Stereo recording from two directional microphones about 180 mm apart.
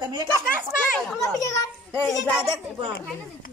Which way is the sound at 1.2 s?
20° left (ahead or behind).